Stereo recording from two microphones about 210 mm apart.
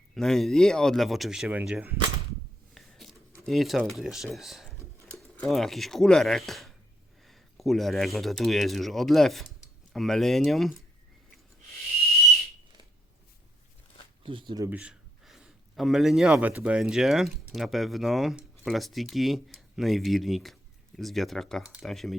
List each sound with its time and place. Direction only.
0.1 s speech: centre (ahead or behind)
2.7 s a sound: centre (ahead or behind)
5.4 s speech: centre (ahead or behind)
14.3 s speech: 25° right (ahead or behind)
14.7 s speech: 5° right (ahead or behind)